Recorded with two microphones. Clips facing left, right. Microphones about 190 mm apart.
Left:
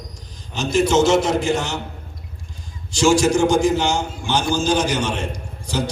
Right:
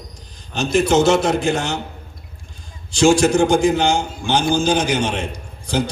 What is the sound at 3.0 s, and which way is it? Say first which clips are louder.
A man's voice: right 2 dB; 55° right (ahead or behind).